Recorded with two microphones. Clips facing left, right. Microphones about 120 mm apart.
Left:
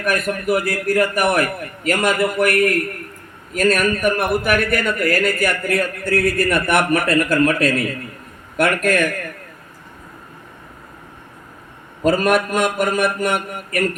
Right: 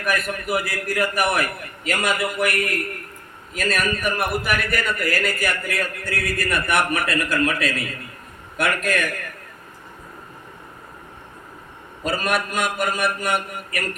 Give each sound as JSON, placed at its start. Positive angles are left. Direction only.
{"t": 0.1, "sound": "a man's voice", "side_deg": 45}
{"t": 12.0, "sound": "a man's voice", "side_deg": 50}